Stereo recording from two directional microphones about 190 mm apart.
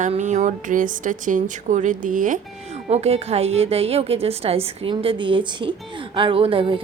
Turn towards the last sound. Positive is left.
turn(degrees=-30)  # may be behind; listen again after turning